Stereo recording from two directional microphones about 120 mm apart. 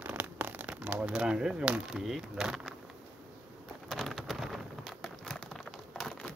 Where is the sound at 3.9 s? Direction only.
Centre (ahead or behind).